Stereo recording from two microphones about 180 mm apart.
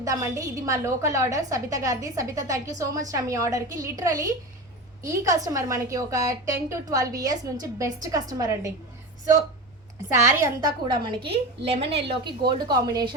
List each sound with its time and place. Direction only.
0.0 s a woman's voice: 20° right (ahead or behind)
10.1 s a woman's voice: 15° right (ahead or behind)